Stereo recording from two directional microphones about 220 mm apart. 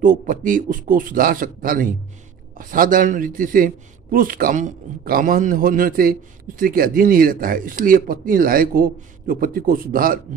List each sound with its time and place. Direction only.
0.0 s speech: 40° right (ahead or behind)